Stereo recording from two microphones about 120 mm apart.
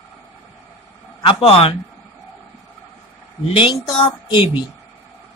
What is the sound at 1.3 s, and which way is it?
Speech, 55° left (ahead or behind).